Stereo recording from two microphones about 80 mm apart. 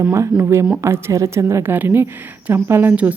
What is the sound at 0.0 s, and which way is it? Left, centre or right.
Speech, right.